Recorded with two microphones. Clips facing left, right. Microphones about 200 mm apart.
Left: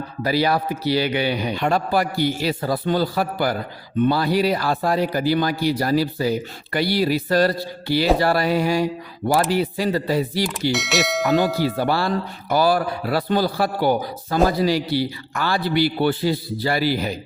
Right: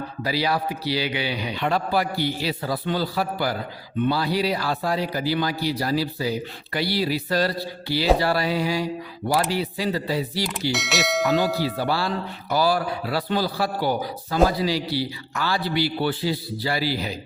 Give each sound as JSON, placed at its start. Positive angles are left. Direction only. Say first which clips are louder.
{"t": 0.2, "sound": "a man's voice", "louder": "left 4 dB", "side_deg": 50}
{"t": 10.7, "sound": "bell", "louder": "left 1 dB", "side_deg": 0}
{"t": 11.6, "sound": "a man's voice", "louder": "left 4 dB", "side_deg": 50}